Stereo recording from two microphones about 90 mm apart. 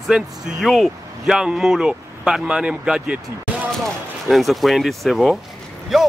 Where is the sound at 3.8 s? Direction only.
Centre (ahead or behind).